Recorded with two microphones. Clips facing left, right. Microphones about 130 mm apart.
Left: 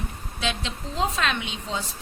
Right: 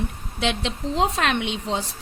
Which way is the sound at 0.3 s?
70° right (ahead or behind).